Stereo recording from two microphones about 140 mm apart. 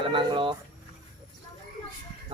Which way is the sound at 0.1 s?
35° right (ahead or behind).